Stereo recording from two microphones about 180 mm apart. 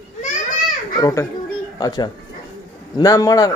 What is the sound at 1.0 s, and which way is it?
A child's voice, 15° left (ahead or behind).